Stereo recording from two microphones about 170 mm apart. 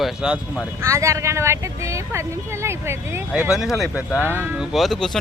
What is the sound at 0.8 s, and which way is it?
Speech, 15° right (ahead or behind).